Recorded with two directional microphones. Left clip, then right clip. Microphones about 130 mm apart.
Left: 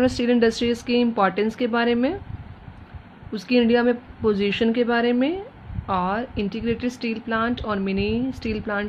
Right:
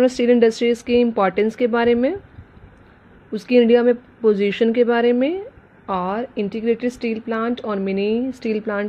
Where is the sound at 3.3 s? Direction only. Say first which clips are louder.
Right 5 dB; 40° right (ahead or behind).